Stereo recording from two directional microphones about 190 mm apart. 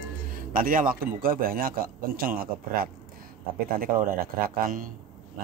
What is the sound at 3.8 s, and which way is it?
A man's voice, 50° right (ahead or behind).